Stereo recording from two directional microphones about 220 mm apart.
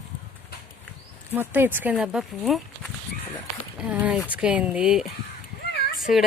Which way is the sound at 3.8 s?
5° right (ahead or behind).